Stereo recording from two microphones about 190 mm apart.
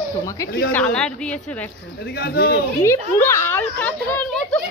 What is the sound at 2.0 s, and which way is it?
Speech, 60° left (ahead or behind).